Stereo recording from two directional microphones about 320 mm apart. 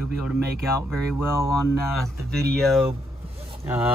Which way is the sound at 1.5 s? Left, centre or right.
Left.